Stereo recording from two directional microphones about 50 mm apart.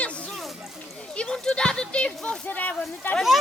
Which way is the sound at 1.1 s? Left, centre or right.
Centre.